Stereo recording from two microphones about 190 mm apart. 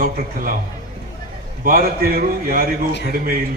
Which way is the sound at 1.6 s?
50° right (ahead or behind).